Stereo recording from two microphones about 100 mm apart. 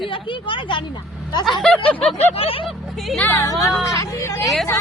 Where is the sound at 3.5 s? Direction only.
35° left (ahead or behind).